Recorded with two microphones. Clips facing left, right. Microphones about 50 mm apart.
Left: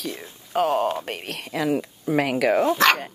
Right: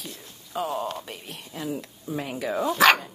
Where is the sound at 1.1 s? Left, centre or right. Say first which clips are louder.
Left 8 dB; left.